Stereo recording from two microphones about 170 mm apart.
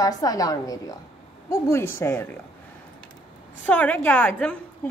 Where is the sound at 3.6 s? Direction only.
10° left (ahead or behind).